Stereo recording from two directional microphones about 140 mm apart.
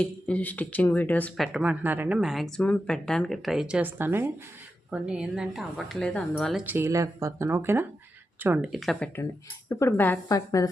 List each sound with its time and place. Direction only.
0.0 s speech: 10° left (ahead or behind)
1.4 s speech: 5° right (ahead or behind)
2.1 s a woman's voice: centre (ahead or behind)
6.7 s speech: 20° right (ahead or behind)
8.9 s a woman's voice: 5° left (ahead or behind); by 10.7 s 25° left (ahead or behind)